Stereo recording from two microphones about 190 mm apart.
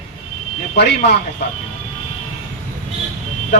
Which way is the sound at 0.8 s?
60° left (ahead or behind).